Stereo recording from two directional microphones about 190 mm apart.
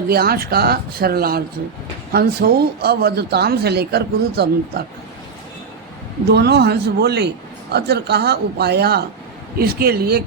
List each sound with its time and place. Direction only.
0.1 s a man's voice: 55° right (ahead or behind)
6.3 s a man's voice: 60° right (ahead or behind)